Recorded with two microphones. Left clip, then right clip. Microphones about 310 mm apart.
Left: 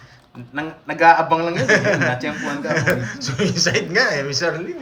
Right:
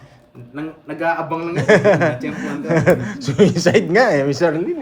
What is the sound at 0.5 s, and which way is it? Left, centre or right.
Speech, left.